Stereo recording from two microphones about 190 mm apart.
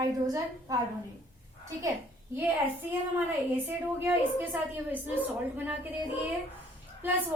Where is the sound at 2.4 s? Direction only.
10° right (ahead or behind).